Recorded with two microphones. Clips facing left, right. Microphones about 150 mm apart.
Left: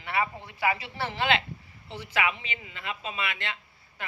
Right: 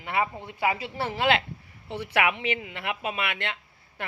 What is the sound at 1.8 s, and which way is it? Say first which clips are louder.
A woman's voice: right 4 dB; 60° right (ahead or behind).